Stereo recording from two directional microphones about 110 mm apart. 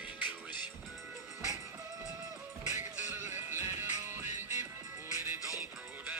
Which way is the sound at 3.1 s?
20° right (ahead or behind).